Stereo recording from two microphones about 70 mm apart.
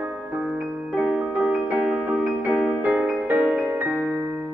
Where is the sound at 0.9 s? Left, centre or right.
Centre.